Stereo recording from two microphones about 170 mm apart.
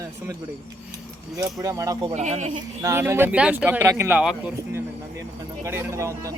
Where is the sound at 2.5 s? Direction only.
15° right (ahead or behind).